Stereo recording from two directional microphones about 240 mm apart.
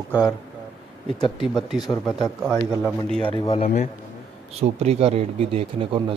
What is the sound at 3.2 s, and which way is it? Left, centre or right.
Speech, left.